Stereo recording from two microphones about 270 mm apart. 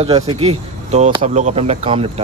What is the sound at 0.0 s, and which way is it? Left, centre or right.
Speech, right.